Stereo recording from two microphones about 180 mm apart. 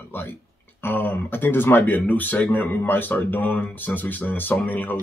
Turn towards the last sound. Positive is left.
turn(degrees=10)  # may be behind; listen again after turning